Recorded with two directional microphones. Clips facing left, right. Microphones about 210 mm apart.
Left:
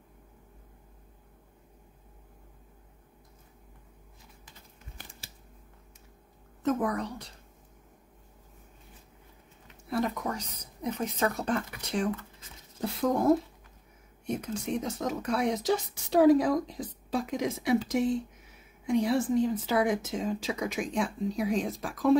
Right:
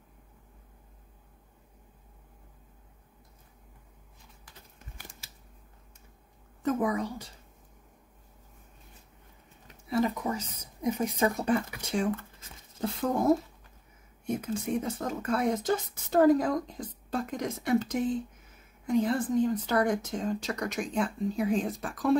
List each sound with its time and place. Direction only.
6.6 s speech: 5° right (ahead or behind)
9.8 s speech: centre (ahead or behind)